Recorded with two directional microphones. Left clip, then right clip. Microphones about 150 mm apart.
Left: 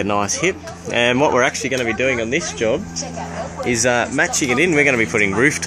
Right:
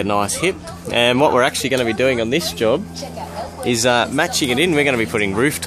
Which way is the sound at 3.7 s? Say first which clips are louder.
Right 1 dB; 10° right (ahead or behind).